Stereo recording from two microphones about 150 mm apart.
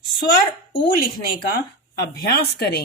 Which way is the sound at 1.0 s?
70° left (ahead or behind).